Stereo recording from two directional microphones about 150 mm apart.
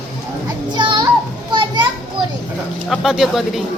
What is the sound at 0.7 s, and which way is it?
Children playing, 30° right (ahead or behind).